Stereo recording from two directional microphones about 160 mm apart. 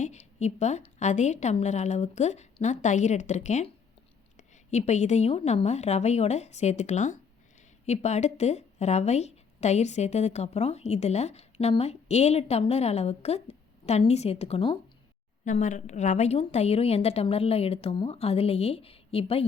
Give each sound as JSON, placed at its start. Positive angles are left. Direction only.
{"t": 0.0, "sound": "a woman's voice", "side_deg": 45}
{"t": 15.4, "sound": "a woman's voice", "side_deg": 50}